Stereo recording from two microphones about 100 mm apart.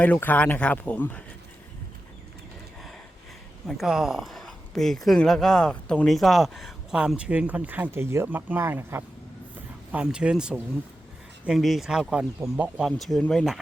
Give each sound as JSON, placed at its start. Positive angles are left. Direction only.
{"t": 0.0, "sound": "speech", "side_deg": 15}
{"t": 3.7, "sound": "speech", "side_deg": -5}
{"t": 9.9, "sound": "speech", "side_deg": -10}
{"t": 12.8, "sound": "speech", "side_deg": 0}